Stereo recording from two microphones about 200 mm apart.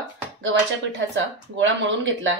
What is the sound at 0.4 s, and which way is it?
Speech, 70° right (ahead or behind).